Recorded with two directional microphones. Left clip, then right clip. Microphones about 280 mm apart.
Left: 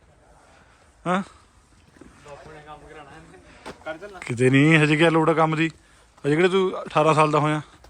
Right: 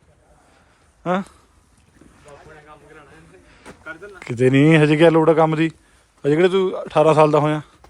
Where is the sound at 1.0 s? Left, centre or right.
Centre.